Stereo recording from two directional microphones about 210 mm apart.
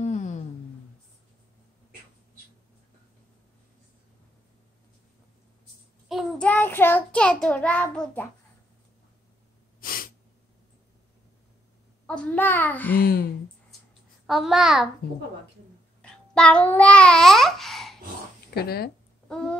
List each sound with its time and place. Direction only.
0.0 s a sound: 35° left (ahead or behind)
6.0 s child singing: centre (ahead or behind)
9.8 s sneeze: 45° left (ahead or behind)
12.1 s a child's voice: 5° left (ahead or behind)
12.9 s speech: 50° left (ahead or behind)
14.2 s a child's voice: centre (ahead or behind)
16.0 s babbling: 5° left (ahead or behind)
18.5 s speech: 50° left (ahead or behind)
19.2 s a sound: 5° left (ahead or behind)